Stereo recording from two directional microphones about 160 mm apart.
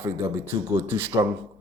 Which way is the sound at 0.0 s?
15° right (ahead or behind).